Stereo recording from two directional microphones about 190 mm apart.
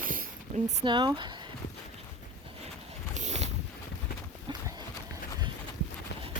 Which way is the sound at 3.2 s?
35° right (ahead or behind).